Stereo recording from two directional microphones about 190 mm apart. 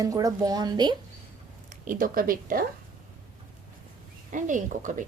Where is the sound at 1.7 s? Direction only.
45° right (ahead or behind).